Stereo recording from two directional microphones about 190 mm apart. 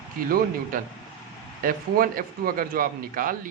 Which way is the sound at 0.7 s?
45° right (ahead or behind).